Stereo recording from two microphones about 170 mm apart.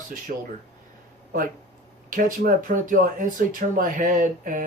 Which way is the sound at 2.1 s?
55° right (ahead or behind).